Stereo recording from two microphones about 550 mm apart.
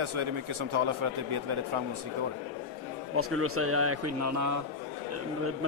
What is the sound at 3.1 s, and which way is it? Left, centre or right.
A man's voice, right.